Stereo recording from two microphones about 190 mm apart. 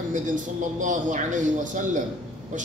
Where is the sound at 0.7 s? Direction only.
40° right (ahead or behind).